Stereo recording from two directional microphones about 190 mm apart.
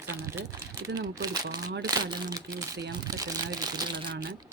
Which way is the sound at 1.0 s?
20° right (ahead or behind).